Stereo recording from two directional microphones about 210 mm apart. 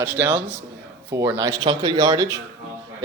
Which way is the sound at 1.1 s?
15° right (ahead or behind).